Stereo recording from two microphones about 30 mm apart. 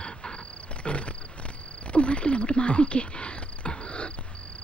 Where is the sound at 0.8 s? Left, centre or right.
Left.